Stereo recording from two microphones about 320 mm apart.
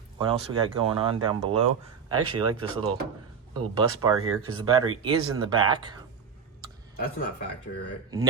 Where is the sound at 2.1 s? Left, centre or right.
Right.